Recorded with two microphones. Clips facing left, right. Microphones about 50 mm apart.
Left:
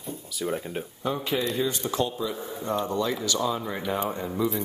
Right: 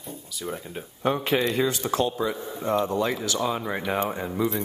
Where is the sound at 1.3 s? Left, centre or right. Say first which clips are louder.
Right 2 dB; right.